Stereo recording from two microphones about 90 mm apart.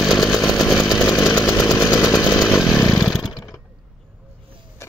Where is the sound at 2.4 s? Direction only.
5° right (ahead or behind).